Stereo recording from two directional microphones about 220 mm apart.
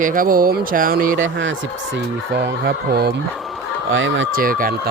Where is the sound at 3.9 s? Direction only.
60° right (ahead or behind).